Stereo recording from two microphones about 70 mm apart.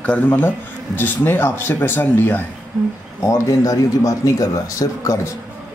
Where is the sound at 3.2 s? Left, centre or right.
Left.